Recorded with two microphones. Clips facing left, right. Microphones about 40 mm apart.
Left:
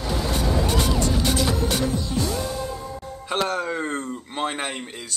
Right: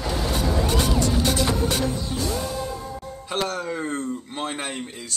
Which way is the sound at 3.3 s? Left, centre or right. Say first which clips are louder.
Left 2 dB; centre.